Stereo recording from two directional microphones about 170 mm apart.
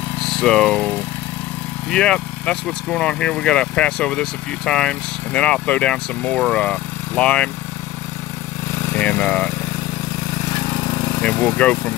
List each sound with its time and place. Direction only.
0.2 s speech: centre (ahead or behind)
8.8 s lawn mower: 15° left (ahead or behind)
10.5 s vehicle: 25° left (ahead or behind)
11.1 s speech: 10° left (ahead or behind)